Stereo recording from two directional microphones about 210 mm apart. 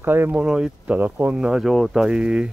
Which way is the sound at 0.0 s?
10° right (ahead or behind).